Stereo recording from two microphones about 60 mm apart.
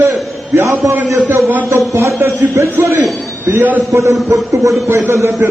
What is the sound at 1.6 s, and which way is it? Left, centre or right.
A man's voice, right.